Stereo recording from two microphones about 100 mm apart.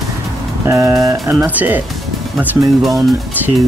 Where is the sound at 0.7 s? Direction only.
35° right (ahead or behind).